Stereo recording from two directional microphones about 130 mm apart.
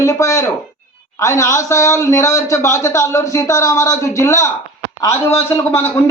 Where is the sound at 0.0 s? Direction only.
25° left (ahead or behind).